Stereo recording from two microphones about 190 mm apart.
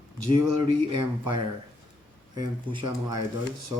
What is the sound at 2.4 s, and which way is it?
Speech, 20° right (ahead or behind).